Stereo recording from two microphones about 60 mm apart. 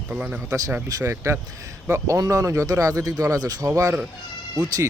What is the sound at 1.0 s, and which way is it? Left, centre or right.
A man's voice, right.